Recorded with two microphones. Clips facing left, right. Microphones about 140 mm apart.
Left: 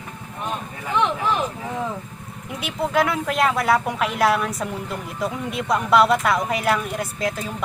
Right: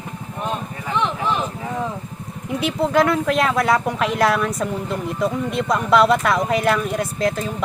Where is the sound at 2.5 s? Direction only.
5° left (ahead or behind).